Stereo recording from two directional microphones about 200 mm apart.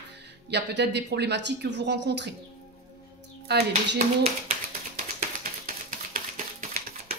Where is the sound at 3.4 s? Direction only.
55° right (ahead or behind).